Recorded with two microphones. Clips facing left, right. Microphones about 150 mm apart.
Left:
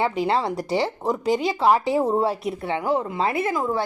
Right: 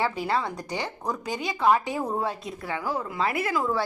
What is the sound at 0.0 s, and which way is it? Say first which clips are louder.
A woman's voice: left 4 dB; 25° left (ahead or behind).